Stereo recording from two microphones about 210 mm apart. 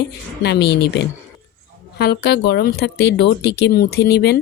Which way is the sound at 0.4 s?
55° left (ahead or behind).